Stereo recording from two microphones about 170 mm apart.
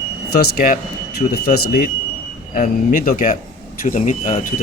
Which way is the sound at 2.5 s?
55° left (ahead or behind).